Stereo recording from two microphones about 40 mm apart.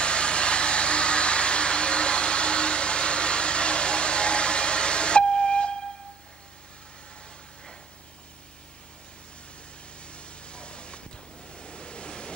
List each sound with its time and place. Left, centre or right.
0.0 s vehicle: left
10.0 s a sound: left
11.5 s waves: left